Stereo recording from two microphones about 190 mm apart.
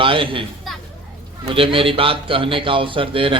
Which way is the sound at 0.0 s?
25° right (ahead or behind).